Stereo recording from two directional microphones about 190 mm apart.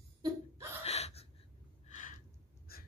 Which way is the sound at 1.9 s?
40° left (ahead or behind).